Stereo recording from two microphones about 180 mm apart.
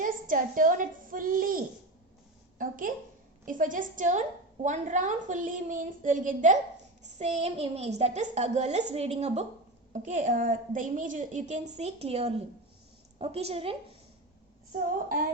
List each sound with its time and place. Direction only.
0.0 s a woman's voice: 50° right (ahead or behind); by 13.7 s 30° right (ahead or behind)